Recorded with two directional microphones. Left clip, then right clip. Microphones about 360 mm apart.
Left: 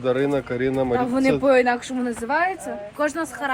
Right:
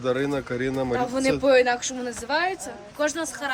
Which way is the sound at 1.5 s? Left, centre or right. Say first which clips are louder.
Even; centre.